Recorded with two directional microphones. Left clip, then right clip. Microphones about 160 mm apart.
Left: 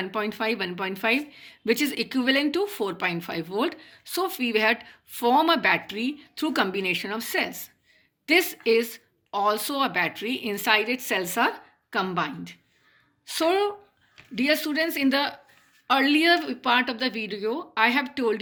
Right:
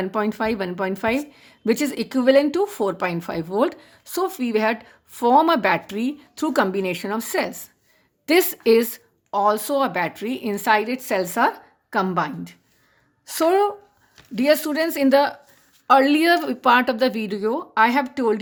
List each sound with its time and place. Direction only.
0.0 s a woman's voice: 40° right (ahead or behind)
5.5 s a woman's voice: 45° right (ahead or behind)
8.3 s a woman's voice: 50° right (ahead or behind)
9.3 s a woman's voice: 30° right (ahead or behind)